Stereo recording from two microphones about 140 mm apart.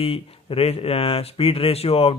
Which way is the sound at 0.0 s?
45° left (ahead or behind).